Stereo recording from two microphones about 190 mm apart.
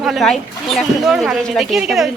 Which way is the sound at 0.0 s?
Centre (ahead or behind).